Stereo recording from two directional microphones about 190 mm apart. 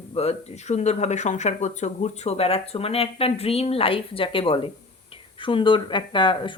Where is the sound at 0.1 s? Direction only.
35° left (ahead or behind).